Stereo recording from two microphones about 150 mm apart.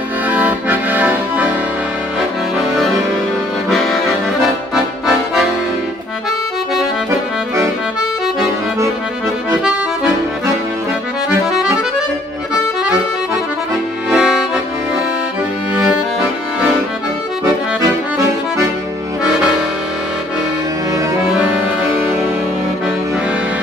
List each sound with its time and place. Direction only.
0.3 s accordion: 10° right (ahead or behind)
3.7 s accordion: centre (ahead or behind)
14.1 s accordion: 5° right (ahead or behind)
17.7 s accordion: 20° right (ahead or behind)